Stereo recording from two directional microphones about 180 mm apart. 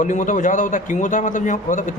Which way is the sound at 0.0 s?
45° left (ahead or behind).